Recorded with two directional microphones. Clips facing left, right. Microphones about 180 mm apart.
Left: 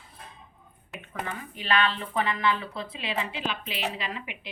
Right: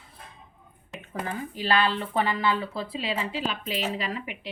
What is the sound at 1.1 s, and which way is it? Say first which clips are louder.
Speech: right 4 dB; 30° right (ahead or behind).